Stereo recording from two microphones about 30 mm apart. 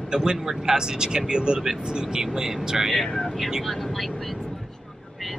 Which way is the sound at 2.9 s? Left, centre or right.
Centre.